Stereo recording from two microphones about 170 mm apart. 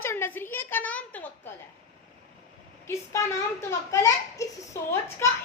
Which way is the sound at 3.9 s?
20° left (ahead or behind).